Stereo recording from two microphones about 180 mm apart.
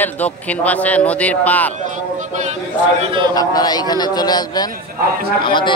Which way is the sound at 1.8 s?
45° right (ahead or behind).